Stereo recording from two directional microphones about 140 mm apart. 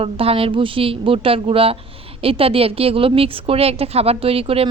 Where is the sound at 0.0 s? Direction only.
40° right (ahead or behind).